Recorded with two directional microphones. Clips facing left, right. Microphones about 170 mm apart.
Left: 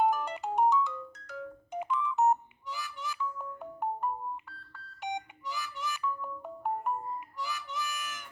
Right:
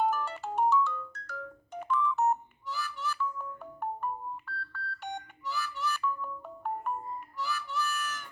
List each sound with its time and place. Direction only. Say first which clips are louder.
0.0 s ringtone: left 2 dB; 15° left (ahead or behind)
7.3 s harmonica: right 7 dB; 15° left (ahead or behind)